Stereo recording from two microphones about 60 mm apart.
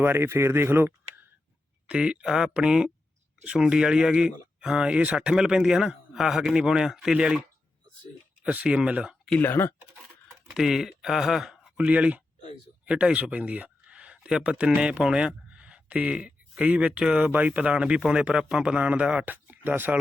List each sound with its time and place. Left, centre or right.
0.0 s speech: right
1.9 s speech: centre
8.4 s speech: right
9.4 s speech: left
10.5 s speech: centre
11.8 s speech: right